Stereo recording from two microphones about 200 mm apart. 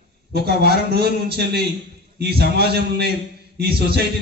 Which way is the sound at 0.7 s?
55° right (ahead or behind).